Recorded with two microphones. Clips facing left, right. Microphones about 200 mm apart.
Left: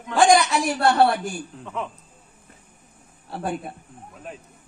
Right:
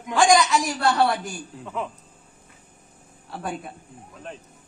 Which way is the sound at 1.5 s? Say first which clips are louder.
Even; centre (ahead or behind).